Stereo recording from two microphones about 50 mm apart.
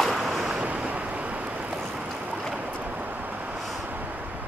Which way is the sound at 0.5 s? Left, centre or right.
Right.